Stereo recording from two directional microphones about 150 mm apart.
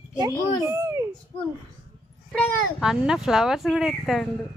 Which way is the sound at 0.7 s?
20° right (ahead or behind).